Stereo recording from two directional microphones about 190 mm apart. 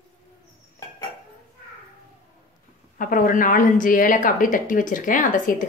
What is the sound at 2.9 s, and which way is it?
Speech, 45° left (ahead or behind).